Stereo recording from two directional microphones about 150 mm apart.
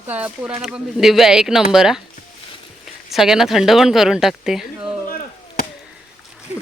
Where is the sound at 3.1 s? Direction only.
5° right (ahead or behind).